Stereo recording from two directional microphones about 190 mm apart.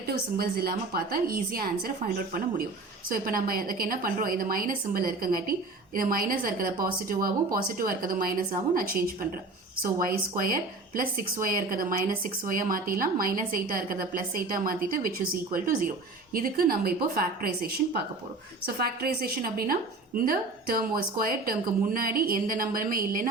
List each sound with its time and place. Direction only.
0.3 s speech: 55° right (ahead or behind)
3.1 s speech: 50° right (ahead or behind)